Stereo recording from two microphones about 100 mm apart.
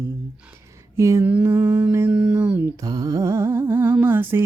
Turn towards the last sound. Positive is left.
turn(degrees=-20)  # may be behind; listen again after turning